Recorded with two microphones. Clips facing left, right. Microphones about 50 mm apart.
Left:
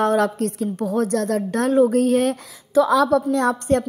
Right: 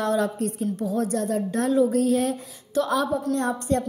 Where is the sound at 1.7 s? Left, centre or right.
Left.